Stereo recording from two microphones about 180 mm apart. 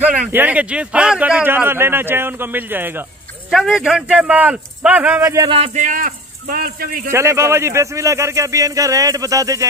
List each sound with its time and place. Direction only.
0.0 s a man's voice: 10° right (ahead or behind)
5.5 s speech: 40° right (ahead or behind); by 7.1 s 55° right (ahead or behind)
7.1 s a man's voice: 15° right (ahead or behind)